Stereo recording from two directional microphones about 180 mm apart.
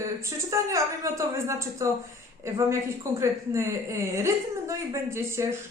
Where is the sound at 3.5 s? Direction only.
15° right (ahead or behind).